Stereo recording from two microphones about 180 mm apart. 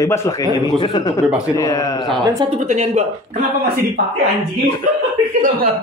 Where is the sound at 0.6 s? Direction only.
25° left (ahead or behind).